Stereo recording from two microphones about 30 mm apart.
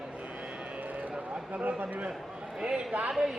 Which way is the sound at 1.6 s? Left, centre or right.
Right.